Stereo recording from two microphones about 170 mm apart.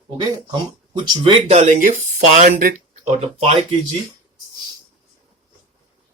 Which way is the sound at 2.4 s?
60° right (ahead or behind).